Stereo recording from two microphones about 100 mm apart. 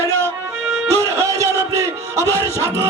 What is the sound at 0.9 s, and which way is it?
Music, 30° right (ahead or behind).